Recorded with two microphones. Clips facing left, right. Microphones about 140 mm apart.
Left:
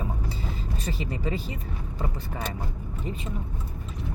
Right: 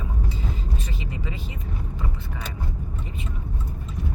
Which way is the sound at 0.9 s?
35° left (ahead or behind).